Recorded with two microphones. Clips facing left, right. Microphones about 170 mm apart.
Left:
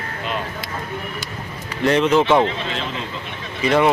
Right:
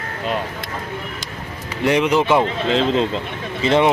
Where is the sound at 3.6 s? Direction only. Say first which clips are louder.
Right 1 dB; 25° right (ahead or behind).